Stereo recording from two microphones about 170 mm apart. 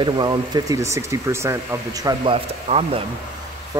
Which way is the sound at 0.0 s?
25° right (ahead or behind).